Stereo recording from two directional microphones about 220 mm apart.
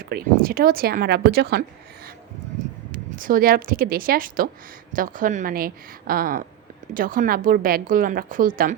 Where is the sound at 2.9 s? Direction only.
40° right (ahead or behind).